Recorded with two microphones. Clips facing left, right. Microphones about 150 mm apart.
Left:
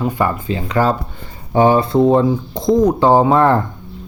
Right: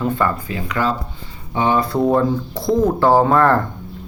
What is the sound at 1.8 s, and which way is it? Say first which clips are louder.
Speech: left 4 dB; 20° left (ahead or behind).